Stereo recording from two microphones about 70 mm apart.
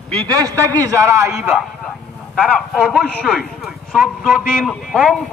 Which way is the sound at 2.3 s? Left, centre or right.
Centre.